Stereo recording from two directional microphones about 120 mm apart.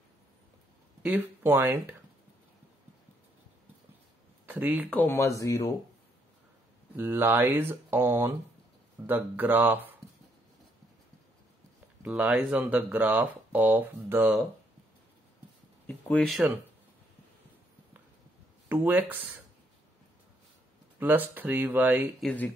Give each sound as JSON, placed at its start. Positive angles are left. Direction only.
{"t": 1.0, "sound": "speech", "side_deg": -15}
{"t": 4.5, "sound": "speech", "side_deg": -15}
{"t": 4.8, "sound": "speech", "side_deg": 15}
{"t": 7.0, "sound": "speech", "side_deg": -15}
{"t": 12.0, "sound": "speech", "side_deg": -10}
{"t": 15.9, "sound": "speech", "side_deg": 10}
{"t": 18.7, "sound": "speech", "side_deg": -15}
{"t": 21.0, "sound": "speech", "side_deg": -15}
{"t": 22.2, "sound": "speech", "side_deg": 0}